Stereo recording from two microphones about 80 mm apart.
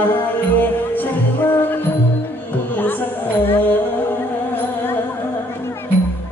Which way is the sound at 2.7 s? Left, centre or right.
Left.